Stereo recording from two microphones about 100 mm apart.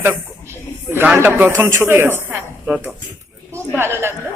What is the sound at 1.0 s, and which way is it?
A man's voice, 20° right (ahead or behind).